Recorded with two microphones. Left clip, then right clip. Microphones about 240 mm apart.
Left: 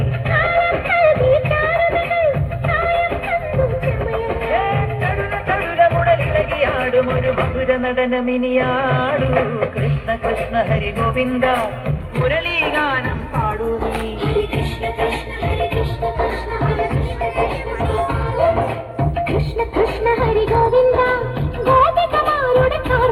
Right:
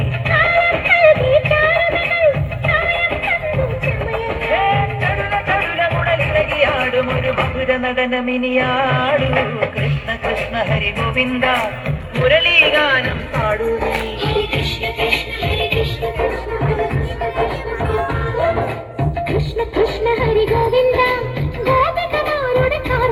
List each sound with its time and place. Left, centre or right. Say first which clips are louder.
0.3 s music: right 2 dB; left
12.2 s speech: right 7 dB; left
13.7 s music: right 3 dB; left
17.9 s music: even; left
19.7 s music: even; left